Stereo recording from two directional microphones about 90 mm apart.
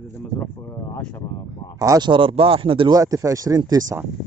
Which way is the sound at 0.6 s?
30° left (ahead or behind).